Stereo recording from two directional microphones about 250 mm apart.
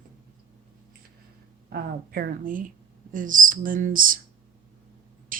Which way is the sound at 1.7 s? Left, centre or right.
Right.